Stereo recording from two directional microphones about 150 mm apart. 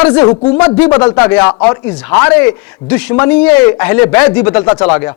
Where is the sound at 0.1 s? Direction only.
20° left (ahead or behind).